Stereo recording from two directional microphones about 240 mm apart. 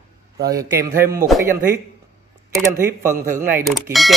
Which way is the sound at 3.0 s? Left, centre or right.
Centre.